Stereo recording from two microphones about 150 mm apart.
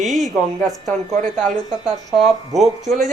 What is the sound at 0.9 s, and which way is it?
Speech, 55° right (ahead or behind).